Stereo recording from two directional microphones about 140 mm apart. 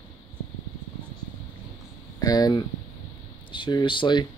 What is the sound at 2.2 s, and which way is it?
Speech, 30° left (ahead or behind).